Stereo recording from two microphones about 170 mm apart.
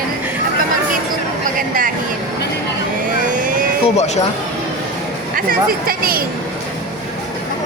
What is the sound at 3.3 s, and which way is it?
Vehicle, 50° right (ahead or behind).